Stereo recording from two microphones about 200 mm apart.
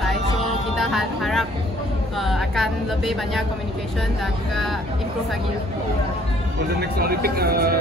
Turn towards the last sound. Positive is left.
turn(degrees=-50)  # may be behind; listen again after turning